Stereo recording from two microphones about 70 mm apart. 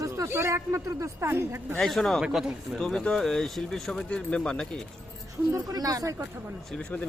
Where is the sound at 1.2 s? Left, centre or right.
Right.